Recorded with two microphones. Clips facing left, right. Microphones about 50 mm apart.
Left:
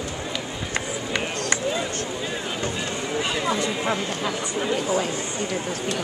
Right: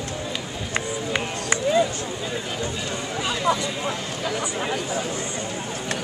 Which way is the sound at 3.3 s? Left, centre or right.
Centre.